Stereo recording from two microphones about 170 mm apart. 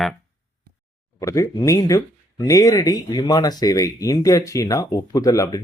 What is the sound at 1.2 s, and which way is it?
Speech, 20° left (ahead or behind).